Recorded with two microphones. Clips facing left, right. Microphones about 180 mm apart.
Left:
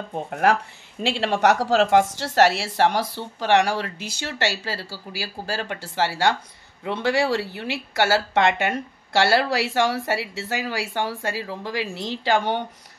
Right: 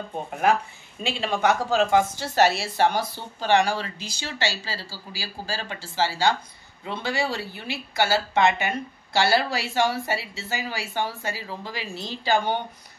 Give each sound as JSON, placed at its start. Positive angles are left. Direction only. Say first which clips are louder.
{"t": 0.3, "sound": "speech", "louder": "left 1 dB", "side_deg": 75}